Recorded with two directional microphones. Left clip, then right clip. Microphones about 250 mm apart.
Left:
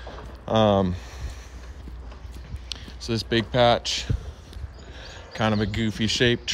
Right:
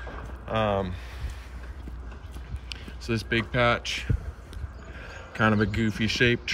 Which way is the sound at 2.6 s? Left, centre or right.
Centre.